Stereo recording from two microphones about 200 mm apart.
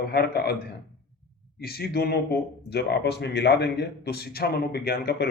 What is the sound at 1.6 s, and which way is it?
Speech, 50° left (ahead or behind).